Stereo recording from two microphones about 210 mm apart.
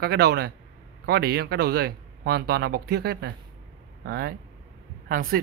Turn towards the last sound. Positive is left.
turn(degrees=-45)  # may be behind; listen again after turning